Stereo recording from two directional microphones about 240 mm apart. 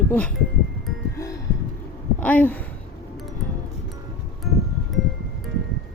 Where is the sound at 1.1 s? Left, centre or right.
Centre.